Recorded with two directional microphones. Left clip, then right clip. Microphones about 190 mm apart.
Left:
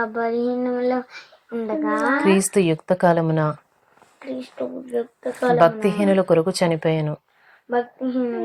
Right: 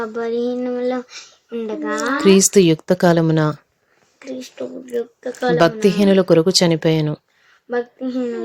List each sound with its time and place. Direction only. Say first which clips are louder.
0.0 s speech: right 1 dB; 30° right (ahead or behind)
2.5 s a woman's voice: right 5 dB; 65° right (ahead or behind)
4.3 s speech: even; 25° right (ahead or behind)
5.5 s a woman's voice: right 3 dB; 60° right (ahead or behind)
8.0 s speech: right 1 dB; 35° right (ahead or behind)